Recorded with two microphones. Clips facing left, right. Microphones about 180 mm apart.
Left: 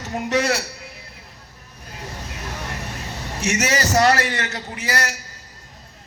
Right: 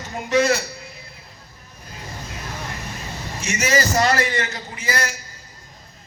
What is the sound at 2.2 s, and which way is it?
Vehicle, 70° left (ahead or behind).